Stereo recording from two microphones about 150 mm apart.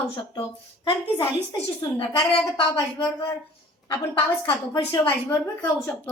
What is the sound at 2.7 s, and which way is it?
Speech, 25° left (ahead or behind).